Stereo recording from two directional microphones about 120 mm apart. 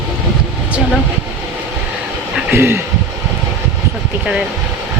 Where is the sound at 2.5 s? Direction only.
20° right (ahead or behind).